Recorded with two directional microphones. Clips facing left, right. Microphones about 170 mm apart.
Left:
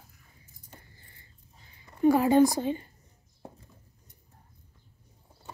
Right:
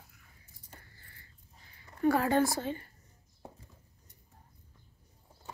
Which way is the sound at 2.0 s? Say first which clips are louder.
Left 6 dB; 15° left (ahead or behind).